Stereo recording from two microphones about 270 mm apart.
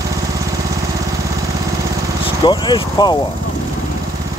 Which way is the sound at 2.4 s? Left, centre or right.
Centre.